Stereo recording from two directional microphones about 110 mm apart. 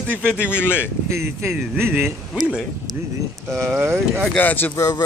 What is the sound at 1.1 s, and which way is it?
Speech, 20° right (ahead or behind).